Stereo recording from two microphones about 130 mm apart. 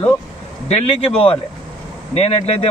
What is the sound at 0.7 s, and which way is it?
A man's voice, 50° left (ahead or behind).